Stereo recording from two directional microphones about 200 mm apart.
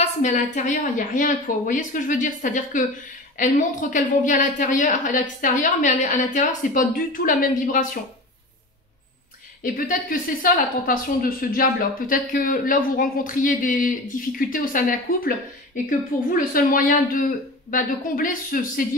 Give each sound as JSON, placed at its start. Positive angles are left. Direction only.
{"t": 0.0, "sound": "a woman's voice", "side_deg": 35}
{"t": 9.6, "sound": "speech", "side_deg": 45}